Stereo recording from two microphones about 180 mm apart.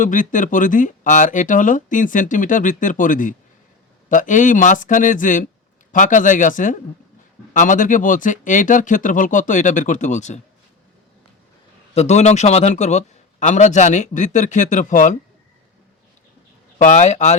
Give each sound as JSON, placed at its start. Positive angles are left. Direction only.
{"t": 0.0, "sound": "speech", "side_deg": 45}
{"t": 11.9, "sound": "a man's voice", "side_deg": 40}
{"t": 16.7, "sound": "a man's voice", "side_deg": 40}